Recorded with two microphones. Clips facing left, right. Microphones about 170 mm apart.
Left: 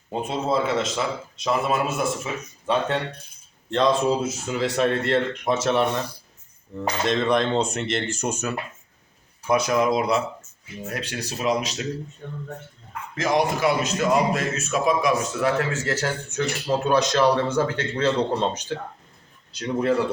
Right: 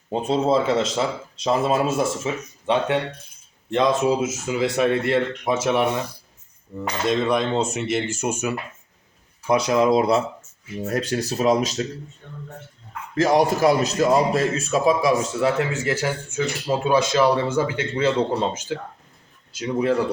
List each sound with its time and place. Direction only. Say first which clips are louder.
0.1 s a man's voice: right 5 dB; 25° right (ahead or behind); by 6.0 s 10° right (ahead or behind)
7.1 s speech: right 1 dB; 5° right (ahead or behind)
9.5 s speech: right 3 dB; 25° right (ahead or behind)
10.8 s speech: right 7 dB; 40° right (ahead or behind)
13.1 s a man's voice: right 4 dB; 40° right (ahead or behind); by 20.0 s 5° right (ahead or behind)